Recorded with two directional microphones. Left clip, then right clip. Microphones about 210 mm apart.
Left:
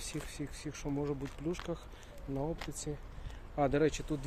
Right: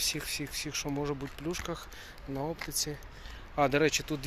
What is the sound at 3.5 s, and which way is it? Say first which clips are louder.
Speech: right 4 dB; 10° right (ahead or behind).